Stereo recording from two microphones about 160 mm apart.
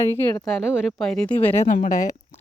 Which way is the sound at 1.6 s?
50° left (ahead or behind).